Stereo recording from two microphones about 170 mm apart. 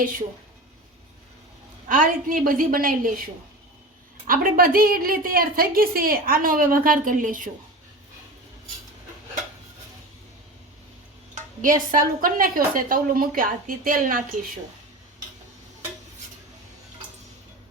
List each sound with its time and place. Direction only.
1.9 s a woman's voice: 50° right (ahead or behind)
4.3 s a woman's voice: 55° right (ahead or behind)
11.6 s a woman's voice: 50° right (ahead or behind)